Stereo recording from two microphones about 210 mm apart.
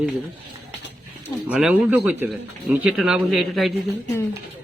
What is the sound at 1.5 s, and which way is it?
Speech, 5° right (ahead or behind).